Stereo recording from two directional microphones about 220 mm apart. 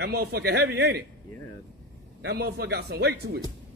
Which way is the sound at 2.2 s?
45° right (ahead or behind).